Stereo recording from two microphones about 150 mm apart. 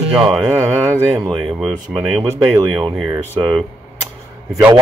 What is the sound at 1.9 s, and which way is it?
Speech, 10° right (ahead or behind).